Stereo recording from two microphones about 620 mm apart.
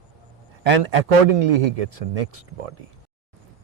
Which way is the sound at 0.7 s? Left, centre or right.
Right.